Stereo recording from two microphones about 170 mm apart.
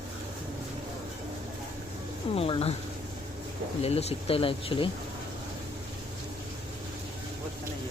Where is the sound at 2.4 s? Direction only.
35° left (ahead or behind).